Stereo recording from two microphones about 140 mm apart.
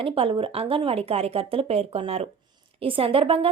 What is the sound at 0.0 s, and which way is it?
A woman's voice, 40° right (ahead or behind).